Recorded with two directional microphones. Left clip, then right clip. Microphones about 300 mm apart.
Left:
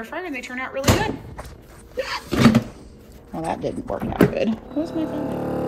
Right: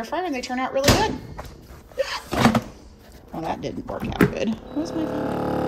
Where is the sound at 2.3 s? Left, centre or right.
Left.